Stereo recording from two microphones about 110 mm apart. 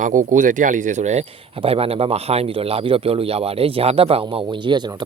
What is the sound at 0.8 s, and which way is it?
Speech, 90° right.